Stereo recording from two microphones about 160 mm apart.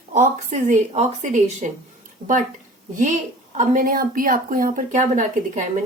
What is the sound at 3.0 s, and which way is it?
A woman's voice, 50° right (ahead or behind).